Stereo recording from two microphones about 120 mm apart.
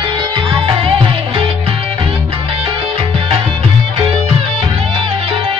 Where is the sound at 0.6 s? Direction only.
50° right (ahead or behind).